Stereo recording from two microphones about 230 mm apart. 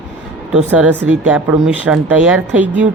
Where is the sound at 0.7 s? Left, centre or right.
Centre.